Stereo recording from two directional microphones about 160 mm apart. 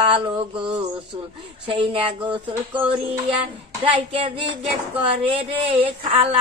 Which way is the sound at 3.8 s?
35° right (ahead or behind).